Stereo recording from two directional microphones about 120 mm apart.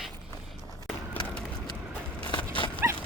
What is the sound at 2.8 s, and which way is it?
Dog, 20° right (ahead or behind).